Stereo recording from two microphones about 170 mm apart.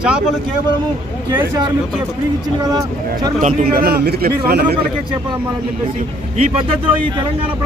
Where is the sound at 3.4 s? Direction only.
55° right (ahead or behind).